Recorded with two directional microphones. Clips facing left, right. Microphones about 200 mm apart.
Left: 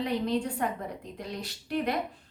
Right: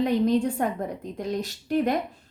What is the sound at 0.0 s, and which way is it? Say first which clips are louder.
A woman's voice: right 7 dB; 45° right (ahead or behind).